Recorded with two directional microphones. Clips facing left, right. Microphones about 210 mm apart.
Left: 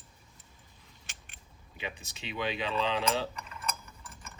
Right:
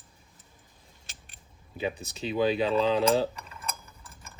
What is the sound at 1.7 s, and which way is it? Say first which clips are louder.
Speech: right 9 dB; 40° right (ahead or behind).